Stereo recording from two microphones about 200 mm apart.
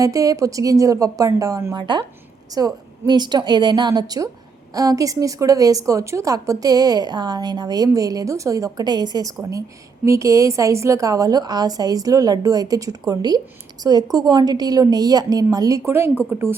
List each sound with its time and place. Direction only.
0.0 s a woman's voice: 15° right (ahead or behind)